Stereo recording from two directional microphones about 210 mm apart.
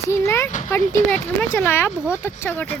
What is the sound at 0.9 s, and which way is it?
Speech, 10° left (ahead or behind).